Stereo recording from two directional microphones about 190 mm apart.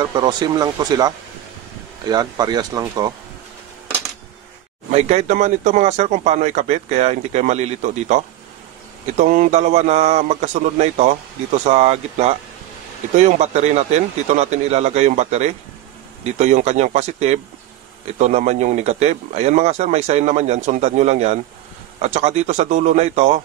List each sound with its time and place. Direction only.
0.0 s speech: 25° right (ahead or behind)
4.9 s speech: 35° right (ahead or behind)